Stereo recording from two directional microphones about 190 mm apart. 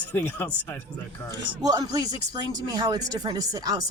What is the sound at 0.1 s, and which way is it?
Speech, 10° left (ahead or behind).